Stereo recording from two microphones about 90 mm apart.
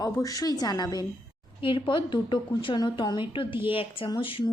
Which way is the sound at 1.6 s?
70° left (ahead or behind).